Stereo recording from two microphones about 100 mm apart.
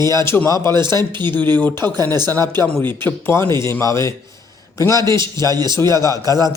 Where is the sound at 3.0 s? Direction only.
25° left (ahead or behind).